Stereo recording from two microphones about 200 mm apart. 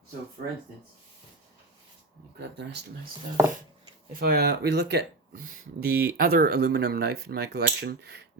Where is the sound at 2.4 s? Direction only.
55° right (ahead or behind).